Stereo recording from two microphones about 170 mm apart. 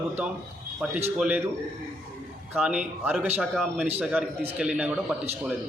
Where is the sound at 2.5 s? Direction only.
5° right (ahead or behind).